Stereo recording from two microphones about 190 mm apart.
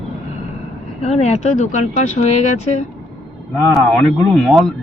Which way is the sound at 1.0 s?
35° left (ahead or behind).